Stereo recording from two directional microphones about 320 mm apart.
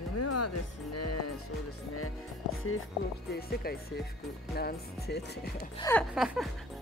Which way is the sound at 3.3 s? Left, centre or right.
Left.